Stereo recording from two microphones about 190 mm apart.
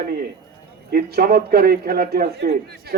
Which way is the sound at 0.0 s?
50° right (ahead or behind).